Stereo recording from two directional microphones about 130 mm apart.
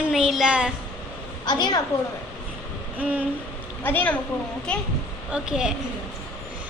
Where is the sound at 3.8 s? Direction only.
15° left (ahead or behind).